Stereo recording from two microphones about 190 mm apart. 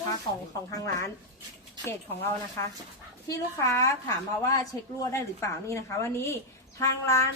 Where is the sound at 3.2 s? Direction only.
15° left (ahead or behind).